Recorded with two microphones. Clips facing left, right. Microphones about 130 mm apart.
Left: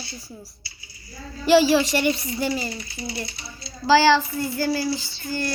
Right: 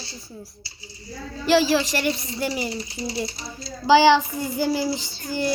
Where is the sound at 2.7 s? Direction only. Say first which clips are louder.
Right 3 dB; 35° right (ahead or behind).